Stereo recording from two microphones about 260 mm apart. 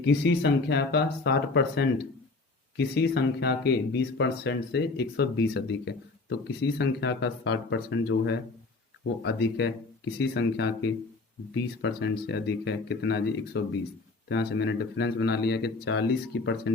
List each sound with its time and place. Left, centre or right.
0.0 s speech: left